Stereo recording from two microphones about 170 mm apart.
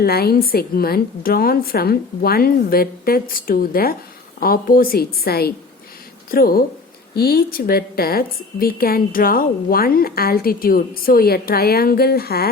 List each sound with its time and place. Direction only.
0.0 s a woman's voice: 65° left (ahead or behind)